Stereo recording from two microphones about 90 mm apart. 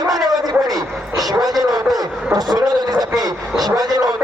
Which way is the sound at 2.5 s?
45° right (ahead or behind).